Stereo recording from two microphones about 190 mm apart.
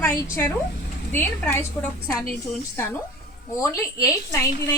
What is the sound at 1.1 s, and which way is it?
Speech, 10° left (ahead or behind).